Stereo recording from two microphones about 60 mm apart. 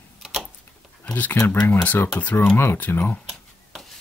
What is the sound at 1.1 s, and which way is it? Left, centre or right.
Speech, left.